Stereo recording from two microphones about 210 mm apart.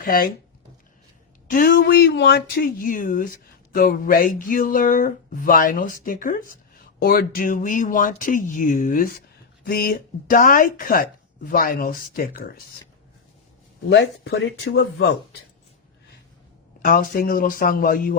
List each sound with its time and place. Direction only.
0.0 s speech: 40° left (ahead or behind)
1.5 s speech: 45° left (ahead or behind)
13.9 s speech: 55° left (ahead or behind)
16.8 s speech: 40° left (ahead or behind)